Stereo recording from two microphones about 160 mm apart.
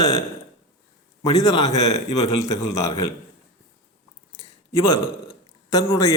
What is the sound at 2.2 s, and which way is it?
Speech, 20° left (ahead or behind).